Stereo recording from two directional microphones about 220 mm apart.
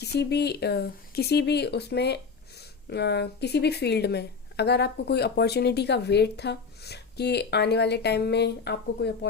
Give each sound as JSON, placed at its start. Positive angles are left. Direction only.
{"t": 0.0, "sound": "speech", "side_deg": 50}